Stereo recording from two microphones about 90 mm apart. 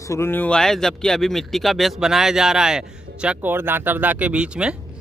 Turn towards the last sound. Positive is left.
turn(degrees=-10)  # may be behind; listen again after turning